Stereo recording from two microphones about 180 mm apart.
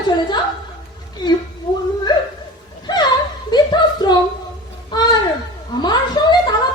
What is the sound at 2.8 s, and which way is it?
Chuckle, 25° left (ahead or behind).